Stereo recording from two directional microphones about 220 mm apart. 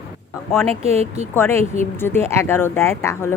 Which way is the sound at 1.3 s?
10° left (ahead or behind).